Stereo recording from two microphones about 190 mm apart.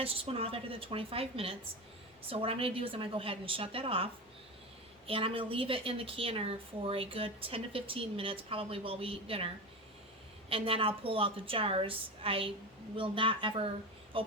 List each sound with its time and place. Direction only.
0.0 s a woman's voice: 30° right (ahead or behind)
10.5 s a woman's voice: 30° right (ahead or behind)